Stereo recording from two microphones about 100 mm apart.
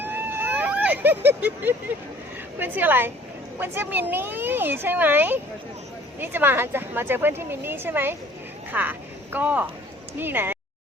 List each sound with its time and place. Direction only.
0.0 s vehicle: 20° right (ahead or behind)
2.6 s speech: 20° right (ahead or behind)